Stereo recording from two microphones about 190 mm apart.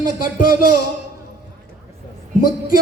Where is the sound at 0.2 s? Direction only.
50° left (ahead or behind).